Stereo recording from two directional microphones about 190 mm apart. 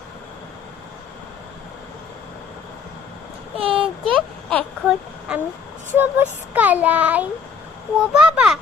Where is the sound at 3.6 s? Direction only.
30° right (ahead or behind).